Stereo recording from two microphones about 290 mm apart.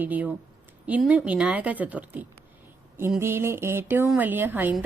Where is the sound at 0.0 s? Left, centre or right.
Centre.